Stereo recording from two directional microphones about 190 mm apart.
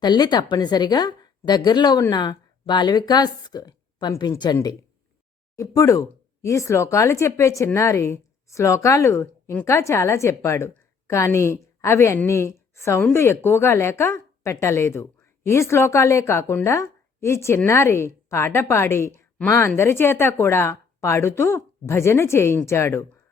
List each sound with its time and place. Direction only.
0.0 s a woman's voice: 20° left (ahead or behind)